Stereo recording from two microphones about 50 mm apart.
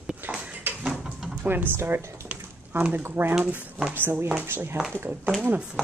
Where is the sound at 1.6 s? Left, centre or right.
Right.